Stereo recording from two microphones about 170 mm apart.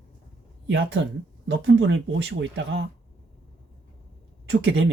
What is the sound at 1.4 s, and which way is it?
Speech, 90° right.